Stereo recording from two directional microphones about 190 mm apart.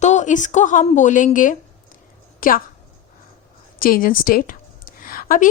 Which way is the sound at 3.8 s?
50° left (ahead or behind).